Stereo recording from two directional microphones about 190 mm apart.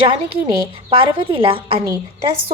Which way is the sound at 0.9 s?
25° right (ahead or behind).